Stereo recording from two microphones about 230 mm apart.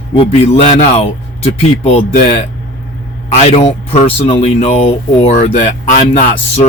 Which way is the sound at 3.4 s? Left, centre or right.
Left.